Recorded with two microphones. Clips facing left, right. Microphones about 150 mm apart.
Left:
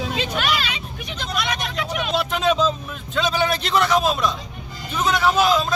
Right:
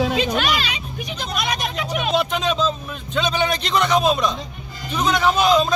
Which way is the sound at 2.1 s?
5° left (ahead or behind).